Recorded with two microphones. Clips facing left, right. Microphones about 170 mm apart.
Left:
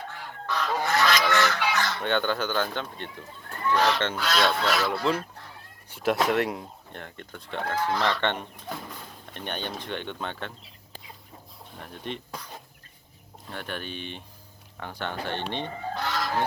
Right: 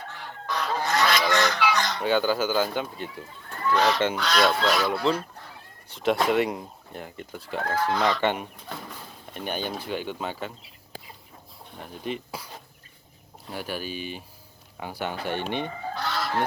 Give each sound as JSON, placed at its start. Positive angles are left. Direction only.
{"t": 0.4, "sound": "goose", "side_deg": -15}
{"t": 2.0, "sound": "speech", "side_deg": -5}
{"t": 3.8, "sound": "goose", "side_deg": -10}
{"t": 4.2, "sound": "speech", "side_deg": 0}
{"t": 11.8, "sound": "speech", "side_deg": -5}
{"t": 13.5, "sound": "speech", "side_deg": -5}
{"t": 16.0, "sound": "goose", "side_deg": 15}